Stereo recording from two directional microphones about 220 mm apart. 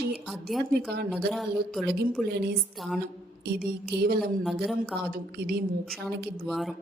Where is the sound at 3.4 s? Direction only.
45° right (ahead or behind).